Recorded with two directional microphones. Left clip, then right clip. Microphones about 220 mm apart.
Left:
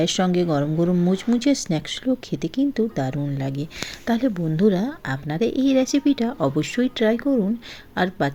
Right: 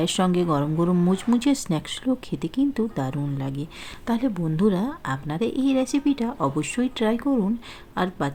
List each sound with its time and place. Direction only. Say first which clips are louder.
0.0 s speech: left 2 dB; centre (ahead or behind)